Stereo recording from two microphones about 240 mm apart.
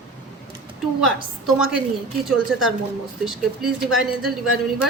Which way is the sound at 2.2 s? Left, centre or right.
Centre.